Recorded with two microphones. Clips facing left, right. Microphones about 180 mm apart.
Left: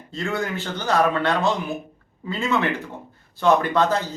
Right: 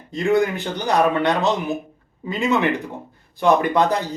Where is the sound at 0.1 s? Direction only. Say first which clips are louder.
Right 8 dB; 15° right (ahead or behind).